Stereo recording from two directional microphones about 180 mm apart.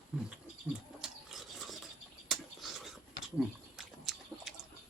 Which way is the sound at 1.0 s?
Centre (ahead or behind).